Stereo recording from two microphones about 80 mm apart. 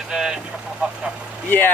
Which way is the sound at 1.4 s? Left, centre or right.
Left.